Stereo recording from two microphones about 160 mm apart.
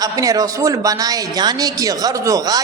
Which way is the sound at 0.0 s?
20° right (ahead or behind).